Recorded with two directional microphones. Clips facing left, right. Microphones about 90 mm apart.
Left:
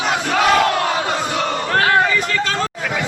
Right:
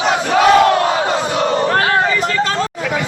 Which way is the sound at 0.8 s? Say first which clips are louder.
Right 4 dB; 30° right (ahead or behind).